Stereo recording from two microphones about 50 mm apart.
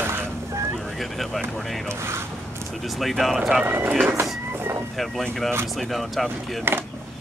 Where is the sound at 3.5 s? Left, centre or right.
Right.